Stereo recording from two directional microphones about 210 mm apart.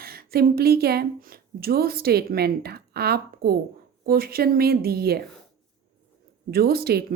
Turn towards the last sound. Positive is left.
turn(degrees=-45)  # may be behind; listen again after turning